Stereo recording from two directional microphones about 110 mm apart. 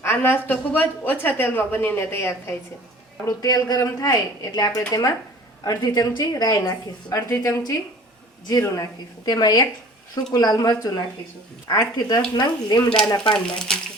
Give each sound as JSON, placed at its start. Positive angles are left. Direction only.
{"t": 0.0, "sound": "a woman's voice", "side_deg": 20}
{"t": 3.2, "sound": "speech", "side_deg": 35}
{"t": 13.3, "sound": "speech", "side_deg": 5}